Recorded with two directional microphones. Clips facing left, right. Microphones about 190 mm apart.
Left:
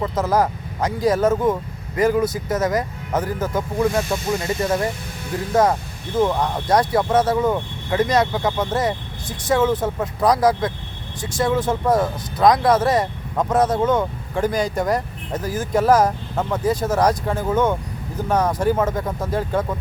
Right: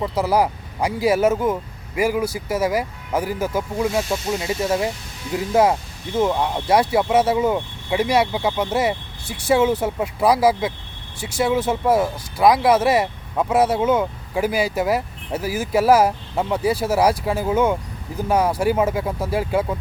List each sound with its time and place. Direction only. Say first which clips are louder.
0.0 s speech: even; 10° right (ahead or behind)